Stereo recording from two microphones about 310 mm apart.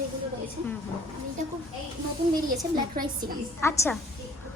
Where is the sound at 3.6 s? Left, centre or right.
Centre.